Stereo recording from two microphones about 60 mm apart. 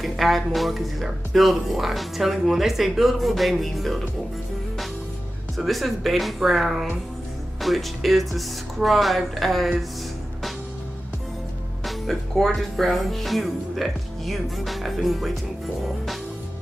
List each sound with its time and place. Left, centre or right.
0.0 s speech: centre
5.6 s speech: centre
11.8 s speech: centre